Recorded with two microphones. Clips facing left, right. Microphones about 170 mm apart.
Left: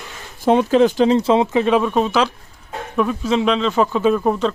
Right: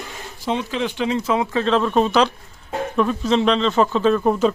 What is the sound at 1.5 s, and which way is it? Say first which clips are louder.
Speech: left 2 dB; 10° left (ahead or behind).